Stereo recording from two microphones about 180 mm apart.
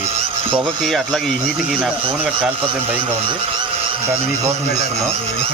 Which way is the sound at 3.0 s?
30° right (ahead or behind).